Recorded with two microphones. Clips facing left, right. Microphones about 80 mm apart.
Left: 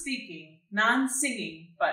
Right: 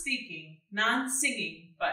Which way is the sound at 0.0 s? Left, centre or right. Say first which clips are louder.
Left 2 dB; left.